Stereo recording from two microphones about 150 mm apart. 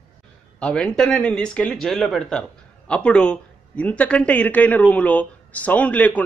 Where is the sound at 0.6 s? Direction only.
5° left (ahead or behind).